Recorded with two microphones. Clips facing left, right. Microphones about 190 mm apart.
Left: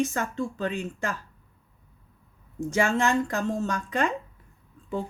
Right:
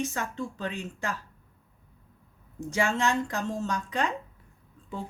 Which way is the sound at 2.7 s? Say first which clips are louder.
Left 3 dB; 50° left (ahead or behind).